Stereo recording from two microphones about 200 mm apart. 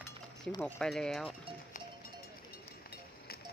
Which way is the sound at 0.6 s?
5° left (ahead or behind).